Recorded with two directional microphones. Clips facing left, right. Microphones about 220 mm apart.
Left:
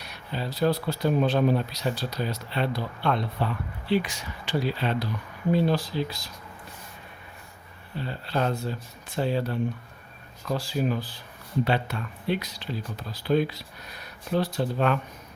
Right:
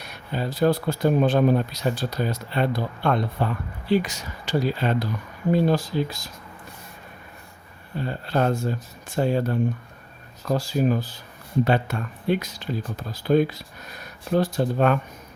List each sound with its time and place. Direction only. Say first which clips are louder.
0.0 s speech: right 4 dB; 50° right (ahead or behind)
7.9 s speech: right 4 dB; 50° right (ahead or behind)